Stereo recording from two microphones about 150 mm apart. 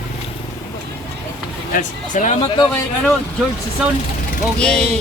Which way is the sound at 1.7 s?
60° left (ahead or behind).